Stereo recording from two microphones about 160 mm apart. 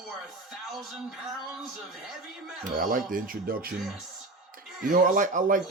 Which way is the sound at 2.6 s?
55° right (ahead or behind).